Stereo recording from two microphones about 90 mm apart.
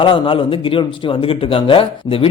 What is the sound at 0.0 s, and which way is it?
Speech, 75° left (ahead or behind).